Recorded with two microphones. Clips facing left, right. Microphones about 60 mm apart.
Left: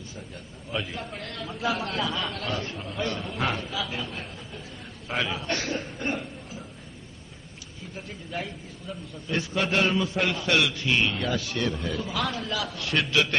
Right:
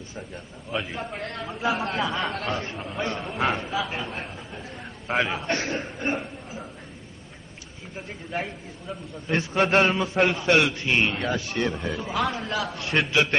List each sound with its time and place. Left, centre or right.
0.8 s a man's voice: right
6.0 s a sound: right
8.3 s a man's voice: right
12.4 s a man's voice: right
12.8 s a man's voice: right